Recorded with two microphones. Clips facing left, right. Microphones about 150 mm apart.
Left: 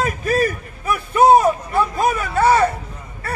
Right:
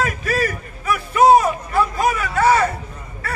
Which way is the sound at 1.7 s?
30° left (ahead or behind).